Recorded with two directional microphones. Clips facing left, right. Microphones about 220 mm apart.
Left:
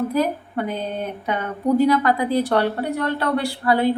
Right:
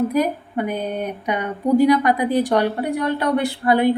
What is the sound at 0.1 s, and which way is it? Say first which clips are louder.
A woman's voice: right 1 dB; 15° right (ahead or behind).